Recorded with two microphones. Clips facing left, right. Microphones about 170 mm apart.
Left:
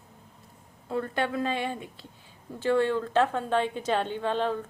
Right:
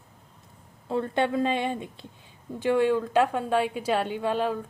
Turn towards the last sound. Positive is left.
turn(degrees=-10)  # may be behind; listen again after turning